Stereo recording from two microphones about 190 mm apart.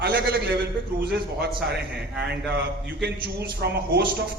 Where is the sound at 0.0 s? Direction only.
55° right (ahead or behind).